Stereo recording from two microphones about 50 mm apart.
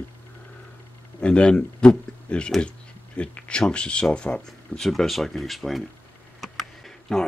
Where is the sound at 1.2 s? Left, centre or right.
Left.